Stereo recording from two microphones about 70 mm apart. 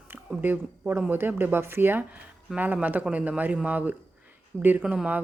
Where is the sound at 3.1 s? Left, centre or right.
Right.